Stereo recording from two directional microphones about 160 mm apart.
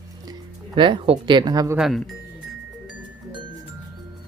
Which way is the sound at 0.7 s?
30° right (ahead or behind).